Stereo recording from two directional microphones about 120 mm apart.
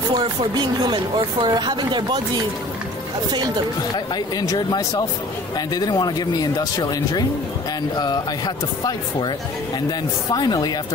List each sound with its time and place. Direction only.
0.6 s speech: 40° right (ahead or behind)
3.9 s speech: 35° left (ahead or behind)
9.8 s speech: 35° left (ahead or behind)